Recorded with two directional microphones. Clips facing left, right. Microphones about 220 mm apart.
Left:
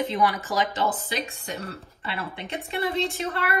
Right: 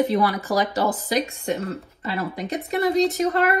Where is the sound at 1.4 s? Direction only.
35° right (ahead or behind).